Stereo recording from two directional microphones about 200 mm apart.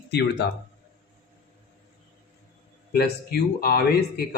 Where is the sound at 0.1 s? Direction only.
55° left (ahead or behind).